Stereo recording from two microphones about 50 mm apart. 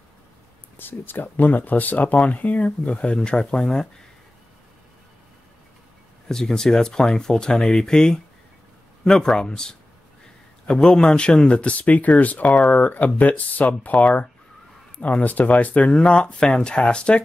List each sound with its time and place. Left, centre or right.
0.7 s speech: left; by 3.9 s centre
6.2 s speech: centre